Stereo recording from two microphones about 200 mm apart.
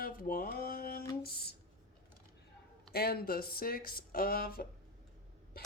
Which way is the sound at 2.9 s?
50° left (ahead or behind).